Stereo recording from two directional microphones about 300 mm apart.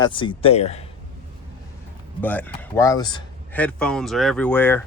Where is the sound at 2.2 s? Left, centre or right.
Centre.